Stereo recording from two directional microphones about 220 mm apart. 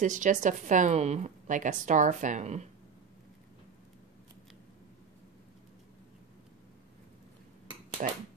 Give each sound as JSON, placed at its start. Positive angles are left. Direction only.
{"t": 0.0, "sound": "a woman's voice", "side_deg": -35}
{"t": 8.0, "sound": "a woman's voice", "side_deg": -35}